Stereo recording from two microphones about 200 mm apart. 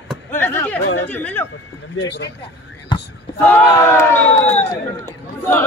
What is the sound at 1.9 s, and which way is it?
Speech, 60° left (ahead or behind).